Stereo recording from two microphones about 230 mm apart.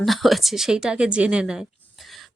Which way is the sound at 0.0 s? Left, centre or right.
Centre.